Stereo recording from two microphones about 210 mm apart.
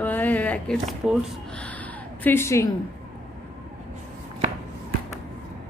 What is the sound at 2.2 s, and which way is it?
Speech, 10° left (ahead or behind).